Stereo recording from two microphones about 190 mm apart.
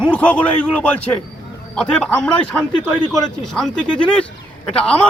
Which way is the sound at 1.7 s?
5° left (ahead or behind).